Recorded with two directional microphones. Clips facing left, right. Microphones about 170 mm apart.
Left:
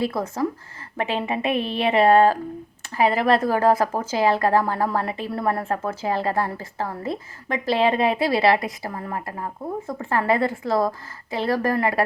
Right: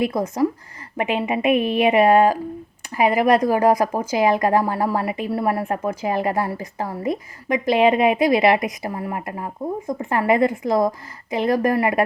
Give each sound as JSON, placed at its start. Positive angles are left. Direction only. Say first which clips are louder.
{"t": 0.0, "sound": "speech", "louder": "right 4 dB", "side_deg": -20}